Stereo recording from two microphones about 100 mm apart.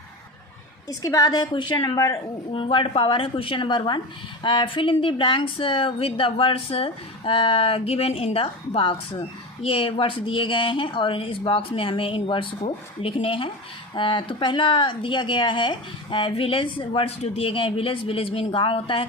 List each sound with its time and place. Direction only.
0.9 s a woman's voice: 40° left (ahead or behind); by 19.0 s 60° left (ahead or behind)